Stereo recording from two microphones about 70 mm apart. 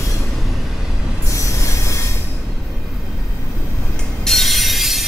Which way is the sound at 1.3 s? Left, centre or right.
Left.